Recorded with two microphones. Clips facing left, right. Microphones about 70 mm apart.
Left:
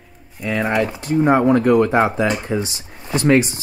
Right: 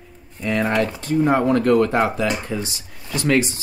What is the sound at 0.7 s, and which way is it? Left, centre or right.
Speech, centre.